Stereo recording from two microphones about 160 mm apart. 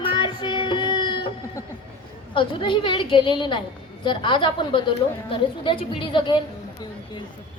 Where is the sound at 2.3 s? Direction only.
30° left (ahead or behind).